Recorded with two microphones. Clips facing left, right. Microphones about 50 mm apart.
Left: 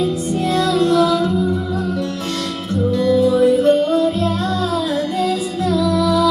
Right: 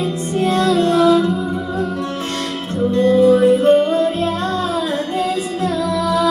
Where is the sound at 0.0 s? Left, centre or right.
Right.